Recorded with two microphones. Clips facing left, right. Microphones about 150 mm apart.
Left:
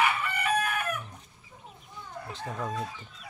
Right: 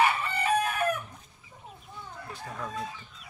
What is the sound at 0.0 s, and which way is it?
Chicken, 30° right (ahead or behind).